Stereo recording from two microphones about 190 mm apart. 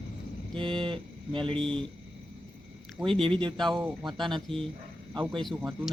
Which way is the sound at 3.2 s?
25° right (ahead or behind).